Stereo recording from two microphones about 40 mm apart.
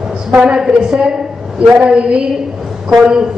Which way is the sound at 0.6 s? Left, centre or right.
Centre.